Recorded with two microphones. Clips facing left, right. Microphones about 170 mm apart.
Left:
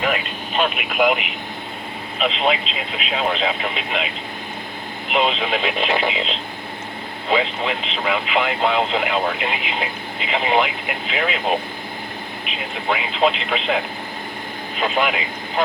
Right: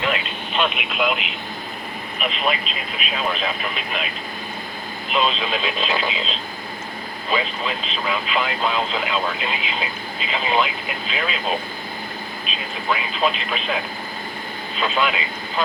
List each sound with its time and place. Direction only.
0.3 s speech: 45° left (ahead or behind)
2.1 s speech: 90° left
5.0 s speech: 65° left (ahead or behind)
14.8 s speech: 55° left (ahead or behind)